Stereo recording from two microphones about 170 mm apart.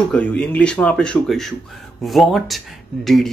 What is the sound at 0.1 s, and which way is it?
Speech, 5° left (ahead or behind).